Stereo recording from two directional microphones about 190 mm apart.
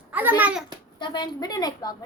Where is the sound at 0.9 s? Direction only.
25° left (ahead or behind).